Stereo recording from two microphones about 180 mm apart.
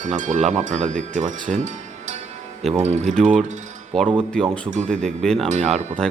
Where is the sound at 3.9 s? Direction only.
5° left (ahead or behind).